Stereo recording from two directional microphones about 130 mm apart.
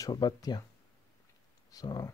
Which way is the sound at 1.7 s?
30° left (ahead or behind).